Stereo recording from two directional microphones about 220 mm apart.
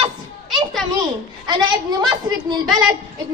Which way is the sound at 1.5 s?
20° right (ahead or behind).